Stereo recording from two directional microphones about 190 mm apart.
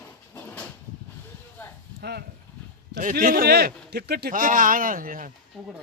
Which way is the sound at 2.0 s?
55° right (ahead or behind).